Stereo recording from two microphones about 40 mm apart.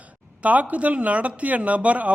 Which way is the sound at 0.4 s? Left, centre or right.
Right.